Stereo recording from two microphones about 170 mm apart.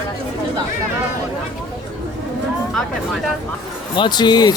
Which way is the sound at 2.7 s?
Centre (ahead or behind).